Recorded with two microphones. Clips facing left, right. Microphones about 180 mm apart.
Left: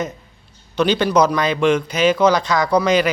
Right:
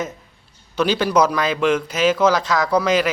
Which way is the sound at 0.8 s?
5° right (ahead or behind).